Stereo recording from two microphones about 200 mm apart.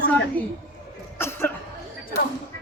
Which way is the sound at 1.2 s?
10° left (ahead or behind).